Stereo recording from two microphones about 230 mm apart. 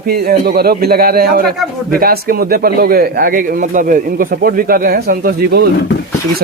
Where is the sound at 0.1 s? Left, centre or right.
Right.